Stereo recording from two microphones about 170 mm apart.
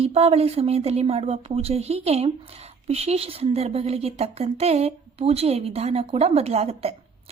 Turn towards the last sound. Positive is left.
turn(degrees=-35)  # may be behind; listen again after turning